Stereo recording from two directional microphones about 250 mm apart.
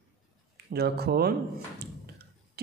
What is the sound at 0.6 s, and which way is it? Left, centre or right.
Speech, right.